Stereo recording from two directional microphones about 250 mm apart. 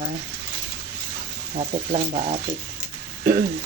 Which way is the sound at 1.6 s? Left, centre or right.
Right.